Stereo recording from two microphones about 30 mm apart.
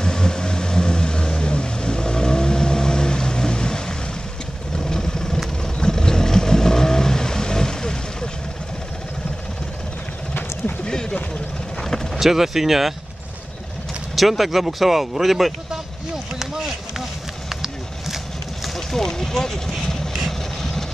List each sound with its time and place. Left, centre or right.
0.0 s vehicle: left
10.9 s vehicle: left
12.2 s speech: centre
14.1 s speech: centre
16.3 s a sound: centre
18.9 s vehicle: centre